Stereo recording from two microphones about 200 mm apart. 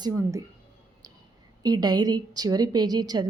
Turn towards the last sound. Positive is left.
turn(degrees=-20)  # may be behind; listen again after turning